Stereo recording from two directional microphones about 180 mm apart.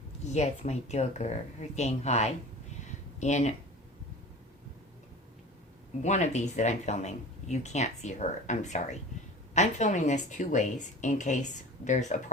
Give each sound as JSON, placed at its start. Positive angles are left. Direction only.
{"t": 0.3, "sound": "speech", "side_deg": 40}
{"t": 6.0, "sound": "a woman's voice", "side_deg": 40}